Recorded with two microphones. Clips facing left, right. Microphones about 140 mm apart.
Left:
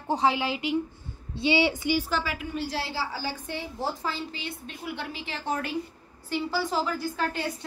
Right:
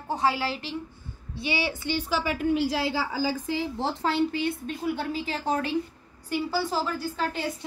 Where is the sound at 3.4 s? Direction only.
90° right; by 5.7 s 30° right (ahead or behind).